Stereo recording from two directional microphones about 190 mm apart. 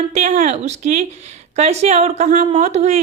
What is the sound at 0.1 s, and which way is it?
A woman's voice, 35° right (ahead or behind).